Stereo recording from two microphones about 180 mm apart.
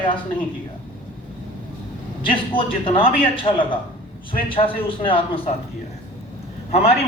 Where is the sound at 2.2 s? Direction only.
30° left (ahead or behind).